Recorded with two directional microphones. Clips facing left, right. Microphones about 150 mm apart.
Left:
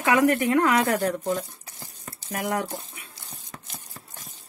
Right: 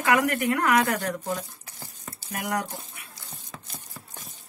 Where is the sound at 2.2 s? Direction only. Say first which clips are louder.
Left 4 dB; 40° left (ahead or behind).